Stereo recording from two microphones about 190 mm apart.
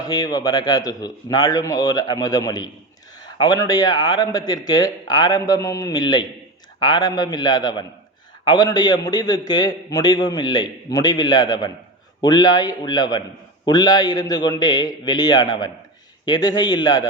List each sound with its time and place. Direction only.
0.0 s a man's voice: 20° left (ahead or behind)